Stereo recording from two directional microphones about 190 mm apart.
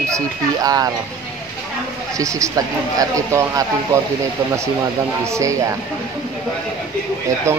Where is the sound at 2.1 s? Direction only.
15° right (ahead or behind).